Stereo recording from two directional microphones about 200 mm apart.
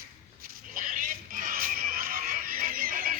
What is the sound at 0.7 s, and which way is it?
Music, 40° right (ahead or behind).